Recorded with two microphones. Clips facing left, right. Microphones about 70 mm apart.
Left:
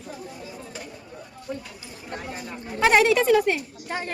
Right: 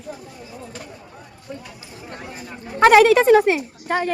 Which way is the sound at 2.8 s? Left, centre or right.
Right.